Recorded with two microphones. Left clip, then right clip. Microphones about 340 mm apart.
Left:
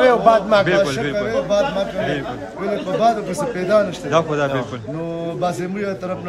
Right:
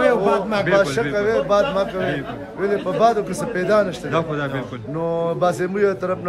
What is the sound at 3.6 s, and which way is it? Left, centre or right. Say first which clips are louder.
A man's voice: left 1 dB; centre.